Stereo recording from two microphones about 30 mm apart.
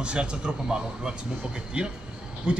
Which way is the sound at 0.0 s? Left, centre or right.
Right.